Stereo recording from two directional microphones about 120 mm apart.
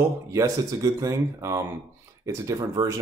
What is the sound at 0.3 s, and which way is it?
Speech, 30° right (ahead or behind).